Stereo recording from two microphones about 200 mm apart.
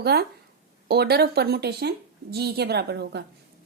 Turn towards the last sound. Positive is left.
turn(degrees=-55)  # may be behind; listen again after turning